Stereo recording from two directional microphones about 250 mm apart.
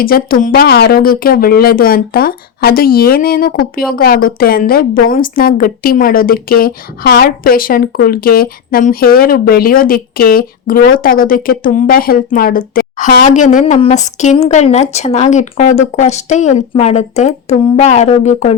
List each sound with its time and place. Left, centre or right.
0.0 s a woman's voice: left